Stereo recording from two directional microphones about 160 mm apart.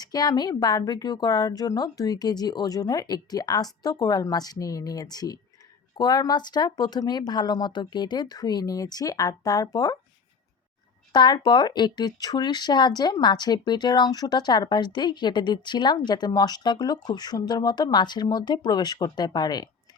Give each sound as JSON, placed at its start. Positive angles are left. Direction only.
{"t": 0.0, "sound": "speech", "side_deg": 25}
{"t": 11.1, "sound": "speech", "side_deg": 30}